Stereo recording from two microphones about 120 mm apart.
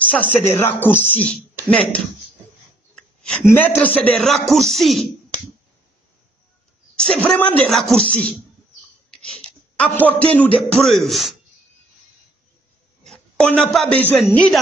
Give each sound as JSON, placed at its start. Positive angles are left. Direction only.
{"t": 0.0, "sound": "music", "side_deg": 15}
{"t": 0.5, "sound": "speech", "side_deg": 20}
{"t": 3.0, "sound": "a sound", "side_deg": 5}
{"t": 3.4, "sound": "speech", "side_deg": 15}
{"t": 7.0, "sound": "a woman's voice", "side_deg": 5}
{"t": 9.2, "sound": "a sound", "side_deg": 10}
{"t": 10.6, "sound": "speech", "side_deg": 0}
{"t": 13.0, "sound": "a man's voice", "side_deg": 5}
{"t": 14.1, "sound": "speech", "side_deg": 0}